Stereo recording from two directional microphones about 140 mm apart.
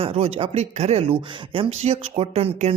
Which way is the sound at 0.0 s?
45° right (ahead or behind).